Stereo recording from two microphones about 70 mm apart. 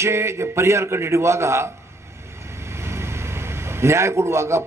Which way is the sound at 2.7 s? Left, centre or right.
Right.